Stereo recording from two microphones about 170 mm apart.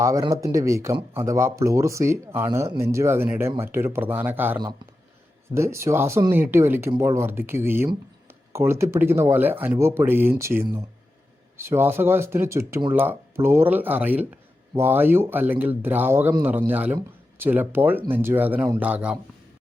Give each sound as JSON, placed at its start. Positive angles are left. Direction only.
{"t": 0.0, "sound": "speech", "side_deg": -20}
{"t": 5.5, "sound": "speech", "side_deg": -15}